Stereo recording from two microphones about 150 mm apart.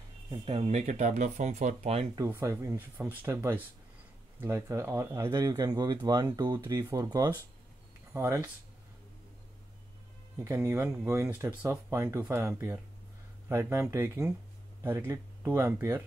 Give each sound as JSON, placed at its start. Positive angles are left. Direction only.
{"t": 0.3, "sound": "speech", "side_deg": -40}
{"t": 2.1, "sound": "speech", "side_deg": -20}
{"t": 10.4, "sound": "speech", "side_deg": -15}